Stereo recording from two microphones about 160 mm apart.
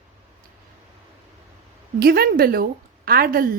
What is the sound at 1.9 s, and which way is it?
A woman's voice, 70° right (ahead or behind).